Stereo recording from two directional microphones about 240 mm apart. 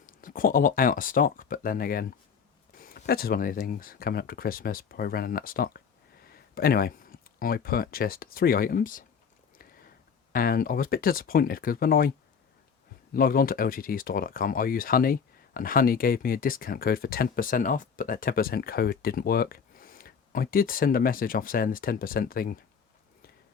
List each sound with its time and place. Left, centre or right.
0.0 s speech: left
9.6 s a sound: left
10.3 s speech: left
13.1 s speech: left